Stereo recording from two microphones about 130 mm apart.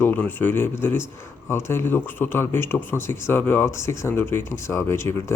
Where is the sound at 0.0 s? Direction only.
15° left (ahead or behind).